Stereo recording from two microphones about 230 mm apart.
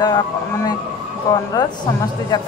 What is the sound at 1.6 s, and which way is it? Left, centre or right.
Speech, centre.